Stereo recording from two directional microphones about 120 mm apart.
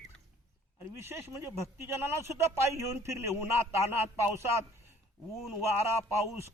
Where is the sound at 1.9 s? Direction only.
20° right (ahead or behind).